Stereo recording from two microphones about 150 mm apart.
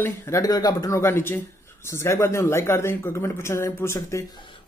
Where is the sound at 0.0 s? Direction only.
20° left (ahead or behind).